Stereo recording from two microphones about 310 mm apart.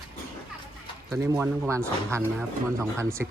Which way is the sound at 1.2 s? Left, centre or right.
Centre.